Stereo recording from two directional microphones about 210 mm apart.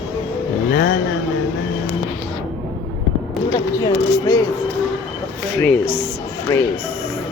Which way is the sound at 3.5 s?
15° left (ahead or behind).